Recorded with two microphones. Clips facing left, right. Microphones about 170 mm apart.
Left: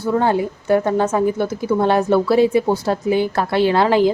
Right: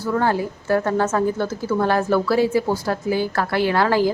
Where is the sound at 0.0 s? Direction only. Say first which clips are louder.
Left 3 dB; 20° left (ahead or behind).